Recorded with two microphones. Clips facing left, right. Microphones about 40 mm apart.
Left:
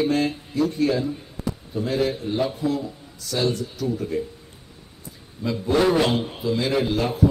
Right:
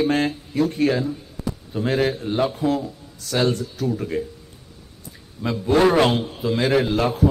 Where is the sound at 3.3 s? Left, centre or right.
Right.